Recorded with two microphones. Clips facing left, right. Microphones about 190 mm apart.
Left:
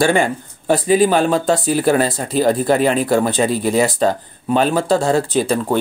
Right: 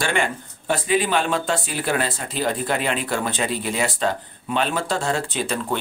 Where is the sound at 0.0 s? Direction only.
35° left (ahead or behind).